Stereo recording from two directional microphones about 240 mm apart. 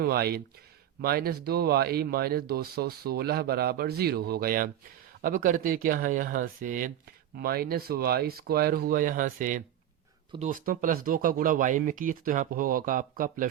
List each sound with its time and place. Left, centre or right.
0.0 s speech: right